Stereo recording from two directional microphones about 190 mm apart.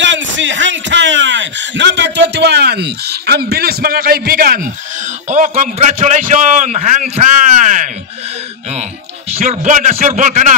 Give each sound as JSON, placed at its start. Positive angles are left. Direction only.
{"t": 0.0, "sound": "a man's voice", "side_deg": -75}
{"t": 9.3, "sound": "speech", "side_deg": -40}